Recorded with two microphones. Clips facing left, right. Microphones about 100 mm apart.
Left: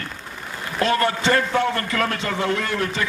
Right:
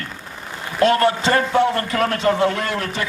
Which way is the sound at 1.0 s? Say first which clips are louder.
Right 3 dB; 25° right (ahead or behind).